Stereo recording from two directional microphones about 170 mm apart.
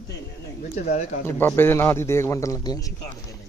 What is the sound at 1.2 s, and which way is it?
A man's voice, 15° left (ahead or behind).